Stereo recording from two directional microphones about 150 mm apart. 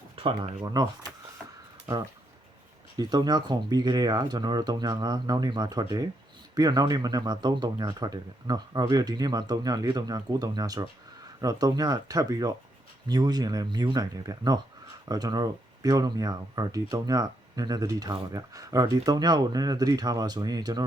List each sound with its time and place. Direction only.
0.6 s speech: 25° right (ahead or behind)
3.0 s speech: 25° right (ahead or behind)